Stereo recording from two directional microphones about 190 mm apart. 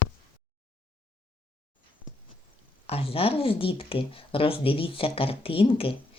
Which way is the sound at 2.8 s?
30° left (ahead or behind).